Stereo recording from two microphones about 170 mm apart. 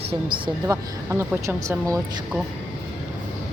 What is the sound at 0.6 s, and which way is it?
Speech, 15° right (ahead or behind).